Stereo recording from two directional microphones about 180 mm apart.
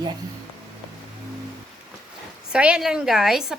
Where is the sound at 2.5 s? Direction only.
5° right (ahead or behind).